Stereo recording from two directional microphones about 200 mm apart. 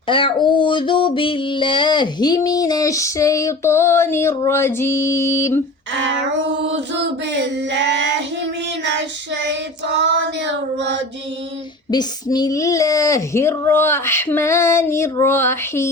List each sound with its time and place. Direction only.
0.1 s female singing: 25° left (ahead or behind)
6.0 s female singing: 65° right (ahead or behind)
7.7 s child singing: 60° right (ahead or behind)
11.9 s female singing: 20° left (ahead or behind)